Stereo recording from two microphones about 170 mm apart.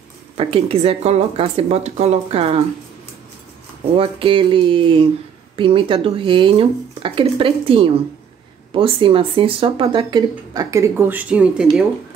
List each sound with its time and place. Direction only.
0.4 s speech: 35° right (ahead or behind)
3.9 s speech: 30° right (ahead or behind); by 11.6 s 5° right (ahead or behind)